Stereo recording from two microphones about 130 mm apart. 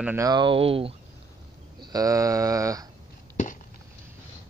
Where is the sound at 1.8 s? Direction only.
30° right (ahead or behind).